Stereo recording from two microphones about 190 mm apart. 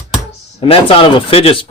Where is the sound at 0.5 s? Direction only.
30° left (ahead or behind).